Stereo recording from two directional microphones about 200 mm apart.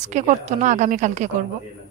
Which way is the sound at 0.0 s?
35° right (ahead or behind).